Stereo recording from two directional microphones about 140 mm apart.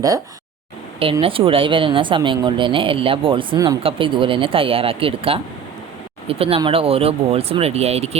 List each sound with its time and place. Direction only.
1.2 s speech: 40° right (ahead or behind)